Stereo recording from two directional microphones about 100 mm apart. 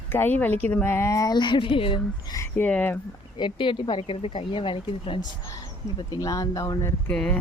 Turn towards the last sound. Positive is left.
turn(degrees=10)  # may be behind; listen again after turning